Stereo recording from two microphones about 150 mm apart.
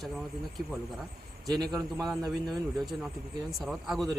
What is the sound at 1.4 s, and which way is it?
A man's voice, centre (ahead or behind).